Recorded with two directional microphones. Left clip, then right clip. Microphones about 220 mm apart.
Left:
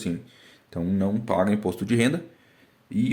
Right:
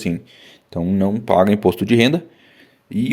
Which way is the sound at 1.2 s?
40° right (ahead or behind).